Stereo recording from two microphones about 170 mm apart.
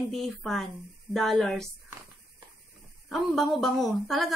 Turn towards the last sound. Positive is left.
turn(degrees=0)  # may be behind; listen again after turning